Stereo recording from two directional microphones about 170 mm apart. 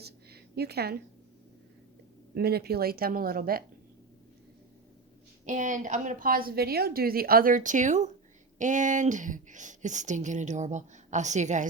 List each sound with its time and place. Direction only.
0.0 s a sound: 70° right (ahead or behind)
2.3 s speech: 70° right (ahead or behind)
5.5 s speech: 45° right (ahead or behind)